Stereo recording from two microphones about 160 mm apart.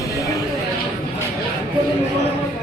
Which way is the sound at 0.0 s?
20° left (ahead or behind).